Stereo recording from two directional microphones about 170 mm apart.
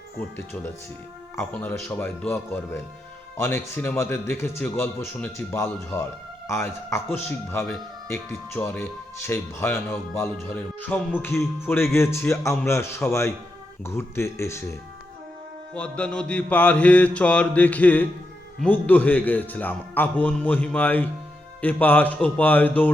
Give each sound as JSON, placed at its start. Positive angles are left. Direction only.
{"t": 0.2, "sound": "speech", "side_deg": 15}